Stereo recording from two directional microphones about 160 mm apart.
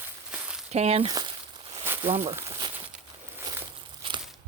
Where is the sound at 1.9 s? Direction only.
15° right (ahead or behind).